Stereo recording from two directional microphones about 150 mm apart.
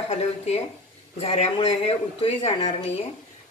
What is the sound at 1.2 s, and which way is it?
A woman's voice, 40° left (ahead or behind).